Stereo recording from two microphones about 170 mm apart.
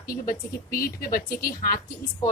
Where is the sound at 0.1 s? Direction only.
60° left (ahead or behind).